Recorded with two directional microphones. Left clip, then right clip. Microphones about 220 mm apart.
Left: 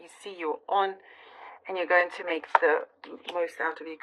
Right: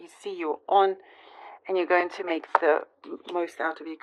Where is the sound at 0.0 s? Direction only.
50° right (ahead or behind).